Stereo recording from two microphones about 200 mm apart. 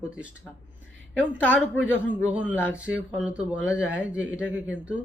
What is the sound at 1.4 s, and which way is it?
Speech, 5° left (ahead or behind).